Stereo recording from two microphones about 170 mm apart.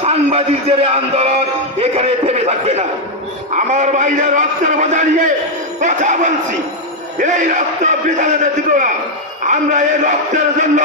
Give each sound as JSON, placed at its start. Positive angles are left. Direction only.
{"t": 0.0, "sound": "a man's voice", "side_deg": -35}